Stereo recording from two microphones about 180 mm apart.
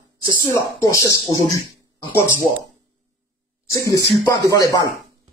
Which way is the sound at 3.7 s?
20° left (ahead or behind).